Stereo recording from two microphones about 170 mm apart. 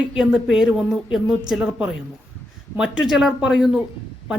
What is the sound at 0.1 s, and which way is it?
Speech, centre (ahead or behind).